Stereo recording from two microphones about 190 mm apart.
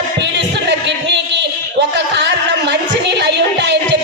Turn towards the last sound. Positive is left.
turn(degrees=-65)  # may be behind; listen again after turning